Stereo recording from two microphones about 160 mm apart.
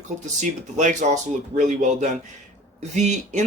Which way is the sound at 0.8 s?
50° right (ahead or behind).